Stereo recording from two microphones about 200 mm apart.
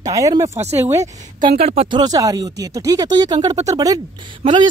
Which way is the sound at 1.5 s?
30° right (ahead or behind).